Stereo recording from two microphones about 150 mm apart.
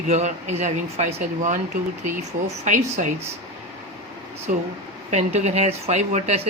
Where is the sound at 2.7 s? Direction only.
55° right (ahead or behind).